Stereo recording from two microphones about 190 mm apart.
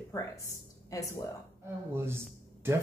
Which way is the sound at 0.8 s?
15° left (ahead or behind).